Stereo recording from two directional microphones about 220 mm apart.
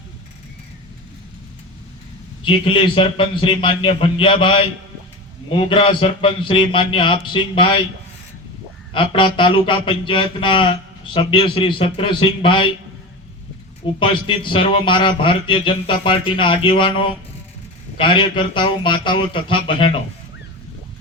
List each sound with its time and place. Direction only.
2.4 s speech: 25° left (ahead or behind)
8.9 s speech: 25° left (ahead or behind)
13.8 s speech: 25° left (ahead or behind)